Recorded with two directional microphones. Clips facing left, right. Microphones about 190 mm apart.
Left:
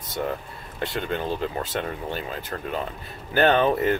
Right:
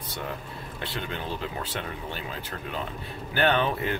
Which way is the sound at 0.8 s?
45° left (ahead or behind).